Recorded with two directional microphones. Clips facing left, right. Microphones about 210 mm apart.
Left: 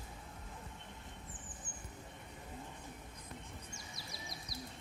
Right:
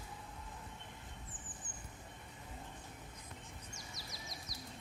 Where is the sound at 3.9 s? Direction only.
45° right (ahead or behind).